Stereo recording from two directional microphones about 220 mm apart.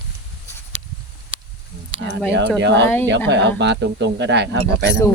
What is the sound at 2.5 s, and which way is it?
Speech, 50° right (ahead or behind).